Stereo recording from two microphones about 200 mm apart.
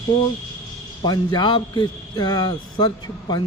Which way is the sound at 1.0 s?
20° left (ahead or behind).